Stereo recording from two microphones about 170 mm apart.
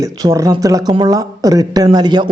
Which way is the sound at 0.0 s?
20° right (ahead or behind).